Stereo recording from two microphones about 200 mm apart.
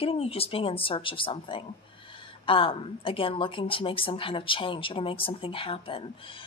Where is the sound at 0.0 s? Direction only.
30° left (ahead or behind).